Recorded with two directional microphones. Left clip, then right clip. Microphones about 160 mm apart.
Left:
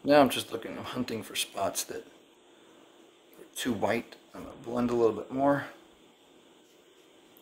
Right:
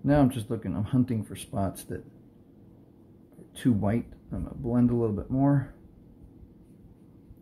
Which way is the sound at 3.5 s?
15° left (ahead or behind).